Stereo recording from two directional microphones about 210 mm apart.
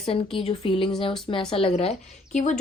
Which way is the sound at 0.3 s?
25° left (ahead or behind).